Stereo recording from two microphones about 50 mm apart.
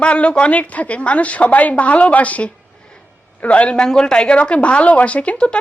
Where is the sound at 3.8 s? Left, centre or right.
Centre.